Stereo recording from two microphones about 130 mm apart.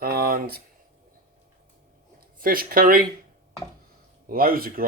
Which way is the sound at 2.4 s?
90° right.